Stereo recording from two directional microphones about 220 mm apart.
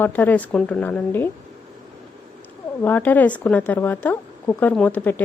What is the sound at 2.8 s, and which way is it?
A woman's voice, 10° left (ahead or behind).